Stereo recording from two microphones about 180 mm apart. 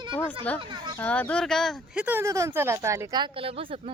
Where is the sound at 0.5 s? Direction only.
25° right (ahead or behind).